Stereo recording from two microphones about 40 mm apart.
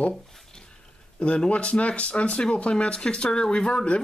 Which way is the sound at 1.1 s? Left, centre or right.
Left.